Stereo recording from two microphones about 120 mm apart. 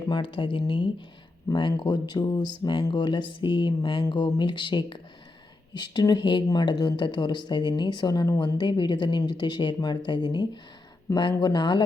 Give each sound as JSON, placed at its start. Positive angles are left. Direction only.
{"t": 0.1, "sound": "speech", "side_deg": 45}